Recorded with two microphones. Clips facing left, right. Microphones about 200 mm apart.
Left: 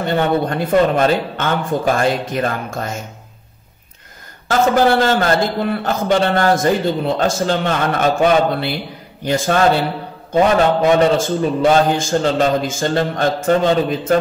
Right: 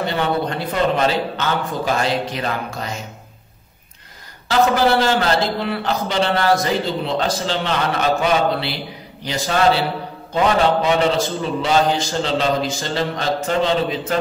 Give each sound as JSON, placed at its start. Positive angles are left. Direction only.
{"t": 0.0, "sound": "speech", "side_deg": 50}
{"t": 4.5, "sound": "speech", "side_deg": 50}